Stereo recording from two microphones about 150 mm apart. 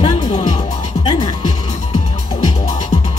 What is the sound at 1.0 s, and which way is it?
Music, 30° left (ahead or behind).